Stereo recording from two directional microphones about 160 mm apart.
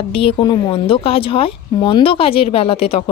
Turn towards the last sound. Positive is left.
turn(degrees=35)  # may be behind; listen again after turning